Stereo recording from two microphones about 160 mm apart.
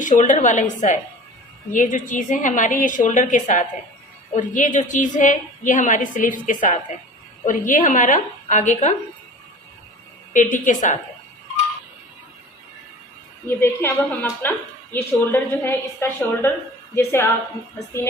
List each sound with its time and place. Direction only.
0.0 s a woman's voice: 50° left (ahead or behind)
10.3 s a woman's voice: 55° left (ahead or behind)
13.6 s a woman's voice: 15° left (ahead or behind)